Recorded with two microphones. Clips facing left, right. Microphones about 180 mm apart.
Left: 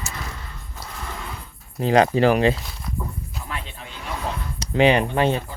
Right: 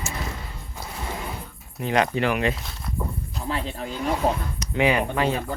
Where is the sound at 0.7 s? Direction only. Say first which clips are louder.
Right 2 dB; 20° right (ahead or behind).